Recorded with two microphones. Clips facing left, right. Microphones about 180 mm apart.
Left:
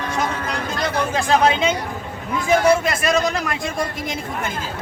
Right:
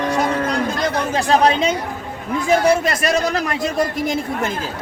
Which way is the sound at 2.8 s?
40° right (ahead or behind).